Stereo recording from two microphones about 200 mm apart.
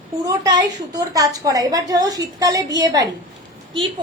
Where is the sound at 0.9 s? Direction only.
15° right (ahead or behind).